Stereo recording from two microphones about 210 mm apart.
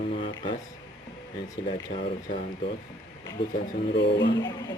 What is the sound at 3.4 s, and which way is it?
Speech, 55° left (ahead or behind).